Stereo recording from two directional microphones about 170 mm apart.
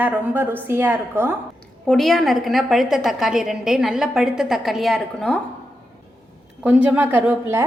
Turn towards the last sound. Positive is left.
turn(degrees=-10)  # may be behind; listen again after turning